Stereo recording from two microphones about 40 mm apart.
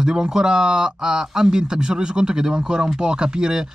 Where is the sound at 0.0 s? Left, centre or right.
Centre.